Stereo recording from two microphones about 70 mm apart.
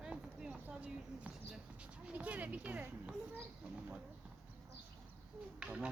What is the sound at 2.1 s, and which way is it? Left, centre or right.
Speech, right.